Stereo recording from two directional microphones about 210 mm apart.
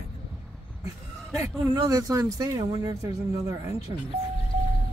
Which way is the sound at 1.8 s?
15° right (ahead or behind).